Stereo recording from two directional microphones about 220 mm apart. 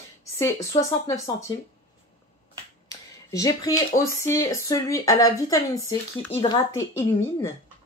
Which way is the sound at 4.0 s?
15° left (ahead or behind).